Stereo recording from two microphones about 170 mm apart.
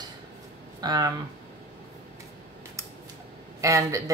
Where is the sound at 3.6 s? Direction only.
20° right (ahead or behind).